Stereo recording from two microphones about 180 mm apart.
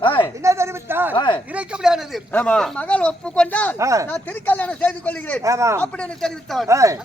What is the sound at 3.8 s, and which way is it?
Speech, 15° right (ahead or behind).